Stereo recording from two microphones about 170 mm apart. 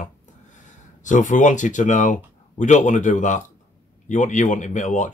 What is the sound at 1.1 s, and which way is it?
Speech, 50° left (ahead or behind).